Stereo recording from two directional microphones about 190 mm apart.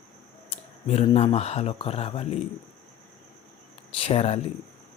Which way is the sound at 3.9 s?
30° left (ahead or behind).